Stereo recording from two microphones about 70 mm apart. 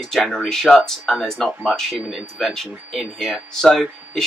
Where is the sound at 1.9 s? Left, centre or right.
Centre.